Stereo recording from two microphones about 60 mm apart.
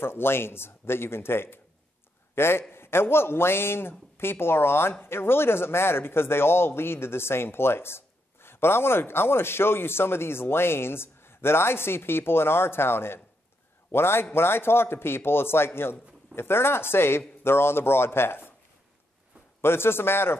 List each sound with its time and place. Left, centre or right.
0.0 s a man's voice: left
19.6 s a man's voice: left